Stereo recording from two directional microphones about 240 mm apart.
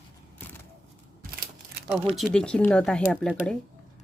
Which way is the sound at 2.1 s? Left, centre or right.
Centre.